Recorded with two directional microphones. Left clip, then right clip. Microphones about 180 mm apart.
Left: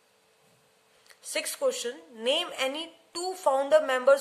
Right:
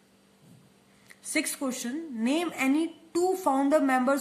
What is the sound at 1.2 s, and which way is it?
A woman's voice, 35° left (ahead or behind).